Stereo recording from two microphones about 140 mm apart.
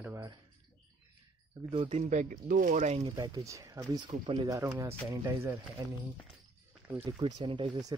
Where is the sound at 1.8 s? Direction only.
60° right (ahead or behind).